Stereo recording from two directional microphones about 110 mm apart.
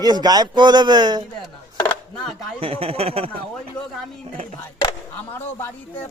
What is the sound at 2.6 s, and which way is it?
Speech, 60° right (ahead or behind).